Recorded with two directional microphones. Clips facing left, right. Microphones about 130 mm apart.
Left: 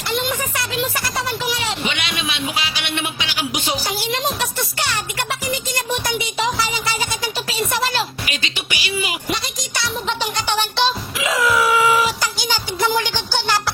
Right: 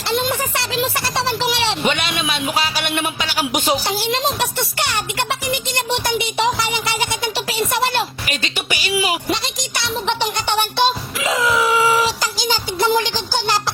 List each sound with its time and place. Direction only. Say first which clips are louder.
0.1 s music: right 3 dB; 30° right (ahead or behind)
1.8 s music: right 4 dB; 45° right (ahead or behind)
3.8 s speech: right 3 dB; 25° right (ahead or behind)
5.6 s music: right 2 dB; 25° right (ahead or behind)
8.3 s music: right 3 dB; 40° right (ahead or behind)
9.7 s music: right 2 dB; 20° right (ahead or behind)
11.3 s a sound: even; 20° right (ahead or behind)
12.5 s music: right 3 dB; 20° right (ahead or behind)